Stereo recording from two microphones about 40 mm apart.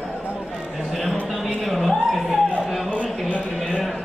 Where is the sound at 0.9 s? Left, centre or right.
Centre.